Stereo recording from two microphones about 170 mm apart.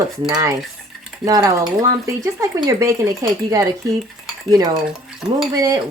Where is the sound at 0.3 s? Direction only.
20° right (ahead or behind).